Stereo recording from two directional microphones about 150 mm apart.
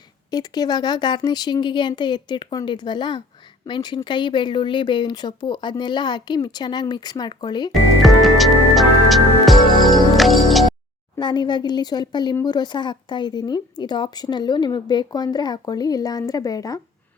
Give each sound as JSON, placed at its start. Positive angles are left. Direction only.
{"t": 0.3, "sound": "speech", "side_deg": 25}
{"t": 7.7, "sound": "music", "side_deg": 0}
{"t": 11.2, "sound": "speech", "side_deg": 30}